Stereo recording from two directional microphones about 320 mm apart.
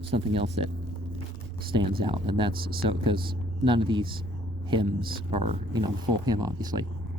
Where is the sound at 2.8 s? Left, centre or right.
Centre.